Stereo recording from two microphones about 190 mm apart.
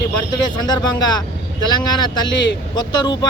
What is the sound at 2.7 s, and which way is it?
Speech, 25° left (ahead or behind).